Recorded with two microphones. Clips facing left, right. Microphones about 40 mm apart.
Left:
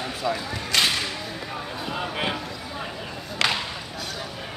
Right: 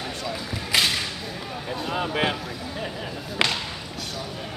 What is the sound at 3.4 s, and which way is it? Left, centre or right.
Whip, centre.